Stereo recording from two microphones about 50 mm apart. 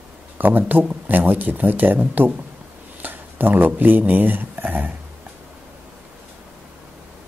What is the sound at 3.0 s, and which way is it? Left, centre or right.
Speech, right.